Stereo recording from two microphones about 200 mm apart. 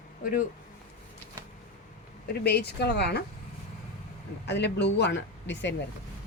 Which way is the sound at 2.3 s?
55° left (ahead or behind).